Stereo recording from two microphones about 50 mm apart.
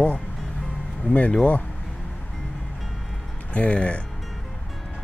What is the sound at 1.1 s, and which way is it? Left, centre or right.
Speech, left.